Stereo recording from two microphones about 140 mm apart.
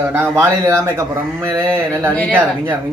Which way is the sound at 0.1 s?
20° right (ahead or behind).